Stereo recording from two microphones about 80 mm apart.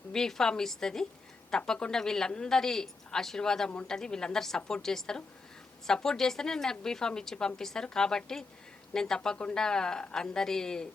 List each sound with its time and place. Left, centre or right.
0.1 s a woman's voice: centre